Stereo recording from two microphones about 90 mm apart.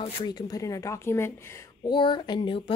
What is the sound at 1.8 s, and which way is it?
Speech, 60° left (ahead or behind).